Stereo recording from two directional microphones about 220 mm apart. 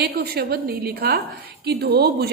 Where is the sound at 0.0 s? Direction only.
45° right (ahead or behind).